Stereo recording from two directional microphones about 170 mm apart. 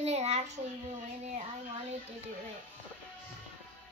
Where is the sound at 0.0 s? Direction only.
40° right (ahead or behind).